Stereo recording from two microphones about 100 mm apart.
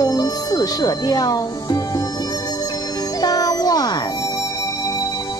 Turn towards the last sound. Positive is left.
turn(degrees=40)  # may be behind; listen again after turning